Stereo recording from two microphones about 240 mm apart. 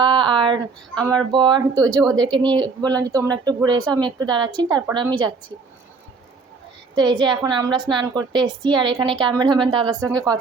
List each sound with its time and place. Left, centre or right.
0.0 s a woman's voice: centre
6.9 s a woman's voice: centre